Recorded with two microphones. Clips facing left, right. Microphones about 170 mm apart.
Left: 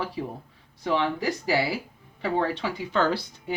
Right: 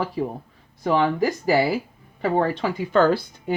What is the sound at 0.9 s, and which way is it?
A woman's voice, 50° right (ahead or behind).